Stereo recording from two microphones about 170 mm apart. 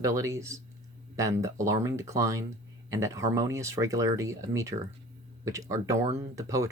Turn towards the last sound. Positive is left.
turn(degrees=-20)  # may be behind; listen again after turning